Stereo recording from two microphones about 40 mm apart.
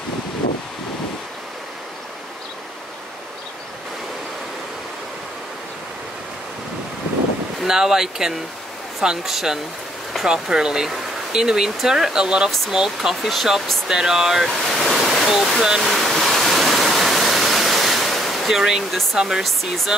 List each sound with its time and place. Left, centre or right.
7.6 s speech: centre
12.4 s speech: centre
12.7 s speech: centre
13.1 s speech: centre
13.8 s speech: centre
14.5 s waterfall: centre
18.5 s speech: centre
19.4 s speech: centre